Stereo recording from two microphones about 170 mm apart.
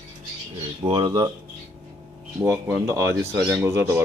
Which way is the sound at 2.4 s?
10° right (ahead or behind).